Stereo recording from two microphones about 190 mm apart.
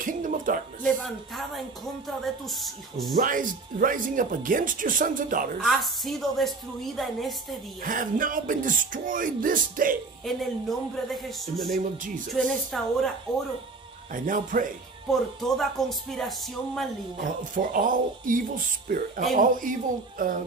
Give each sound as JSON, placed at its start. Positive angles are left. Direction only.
{"t": 0.0, "sound": "a sound", "side_deg": -45}
{"t": 0.8, "sound": "speech", "side_deg": 0}
{"t": 3.2, "sound": "speech", "side_deg": -45}
{"t": 5.6, "sound": "speech", "side_deg": 0}
{"t": 7.8, "sound": "speech", "side_deg": -45}
{"t": 10.2, "sound": "speech", "side_deg": 0}
{"t": 14.1, "sound": "speech", "side_deg": -45}
{"t": 15.0, "sound": "speech", "side_deg": 0}
{"t": 17.4, "sound": "speech", "side_deg": -45}